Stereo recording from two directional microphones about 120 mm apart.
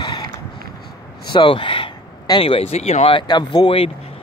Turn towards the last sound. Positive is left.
turn(degrees=45)  # may be behind; listen again after turning